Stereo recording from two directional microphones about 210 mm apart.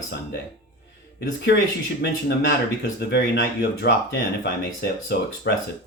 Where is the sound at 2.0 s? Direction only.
55° left (ahead or behind).